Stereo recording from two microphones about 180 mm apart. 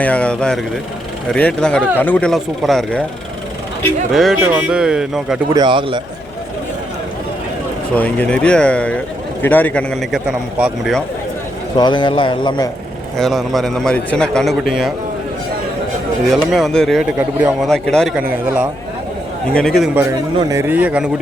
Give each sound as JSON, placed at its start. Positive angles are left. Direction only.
{"t": 0.0, "sound": "a man's voice", "side_deg": 5}
{"t": 4.1, "sound": "a man's voice", "side_deg": 0}
{"t": 5.5, "sound": "a man's voice", "side_deg": -25}
{"t": 7.9, "sound": "a man's voice", "side_deg": 10}
{"t": 11.8, "sound": "a man's voice", "side_deg": 25}
{"t": 13.1, "sound": "a man's voice", "side_deg": 0}
{"t": 16.4, "sound": "a man's voice", "side_deg": 0}
{"t": 17.2, "sound": "a man's voice", "side_deg": -10}
{"t": 17.7, "sound": "a man's voice", "side_deg": 5}
{"t": 18.2, "sound": "a man's voice", "side_deg": -10}
{"t": 19.5, "sound": "a man's voice", "side_deg": 0}
{"t": 20.0, "sound": "a man's voice", "side_deg": -15}